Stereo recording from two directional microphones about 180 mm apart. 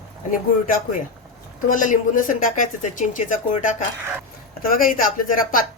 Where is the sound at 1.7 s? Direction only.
45° left (ahead or behind).